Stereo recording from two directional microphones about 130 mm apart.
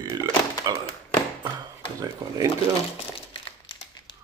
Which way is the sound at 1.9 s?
30° right (ahead or behind).